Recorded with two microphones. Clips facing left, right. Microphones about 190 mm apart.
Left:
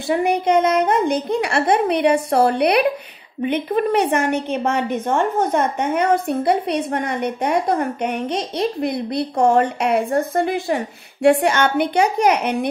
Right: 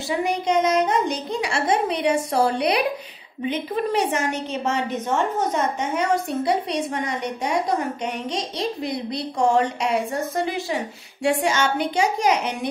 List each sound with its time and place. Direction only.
0.1 s a woman's voice: 55° left (ahead or behind)